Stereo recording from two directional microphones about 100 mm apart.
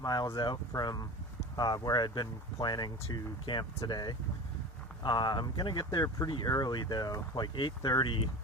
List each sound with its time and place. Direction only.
0.0 s speech: 40° left (ahead or behind); by 8.2 s 55° left (ahead or behind)